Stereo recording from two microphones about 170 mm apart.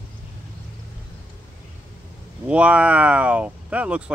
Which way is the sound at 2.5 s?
10° right (ahead or behind).